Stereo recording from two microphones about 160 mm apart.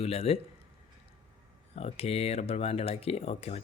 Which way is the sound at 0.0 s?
40° left (ahead or behind).